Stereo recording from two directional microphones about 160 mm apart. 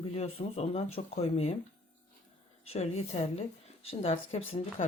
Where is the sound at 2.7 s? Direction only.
40° left (ahead or behind).